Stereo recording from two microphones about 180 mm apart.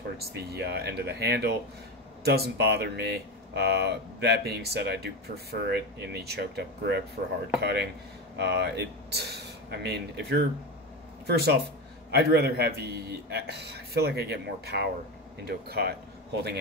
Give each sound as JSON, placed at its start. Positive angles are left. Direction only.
{"t": 0.3, "sound": "speech", "side_deg": -65}